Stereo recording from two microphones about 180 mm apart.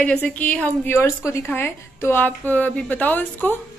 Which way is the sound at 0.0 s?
5° left (ahead or behind).